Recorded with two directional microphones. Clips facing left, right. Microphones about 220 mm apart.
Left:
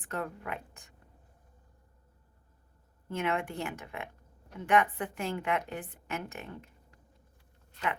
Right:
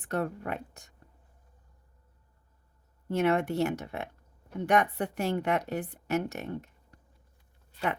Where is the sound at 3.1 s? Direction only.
40° right (ahead or behind).